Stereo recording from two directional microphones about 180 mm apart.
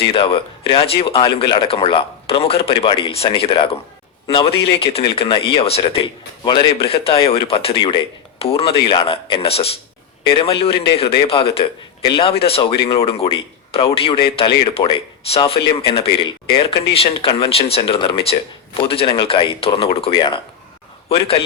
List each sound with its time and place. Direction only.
0.1 s speech: 30° left (ahead or behind)